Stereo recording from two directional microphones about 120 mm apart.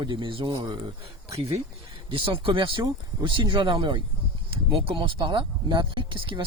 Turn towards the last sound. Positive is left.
turn(degrees=-45)  # may be behind; listen again after turning